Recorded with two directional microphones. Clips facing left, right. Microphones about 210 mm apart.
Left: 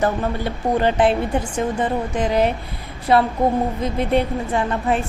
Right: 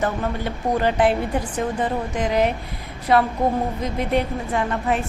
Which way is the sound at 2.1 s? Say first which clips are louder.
Left 1 dB; 30° left (ahead or behind).